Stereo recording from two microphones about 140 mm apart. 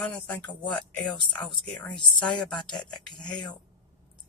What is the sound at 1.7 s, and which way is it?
Speech, 5° left (ahead or behind).